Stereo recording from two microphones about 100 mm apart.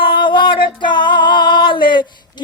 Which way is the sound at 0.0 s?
55° left (ahead or behind).